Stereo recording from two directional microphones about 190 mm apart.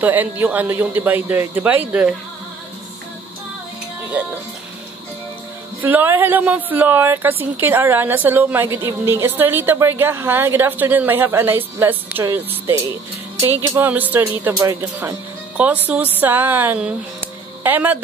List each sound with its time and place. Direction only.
0.0 s speech: 10° right (ahead or behind)
5.8 s speech: 10° right (ahead or behind)